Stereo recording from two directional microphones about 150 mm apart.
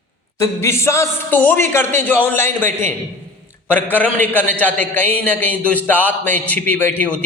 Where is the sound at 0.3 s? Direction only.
20° left (ahead or behind).